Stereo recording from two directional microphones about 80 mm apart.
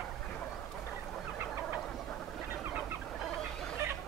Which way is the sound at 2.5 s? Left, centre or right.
Right.